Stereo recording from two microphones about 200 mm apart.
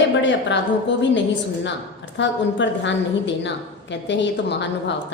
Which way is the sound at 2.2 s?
65° left (ahead or behind).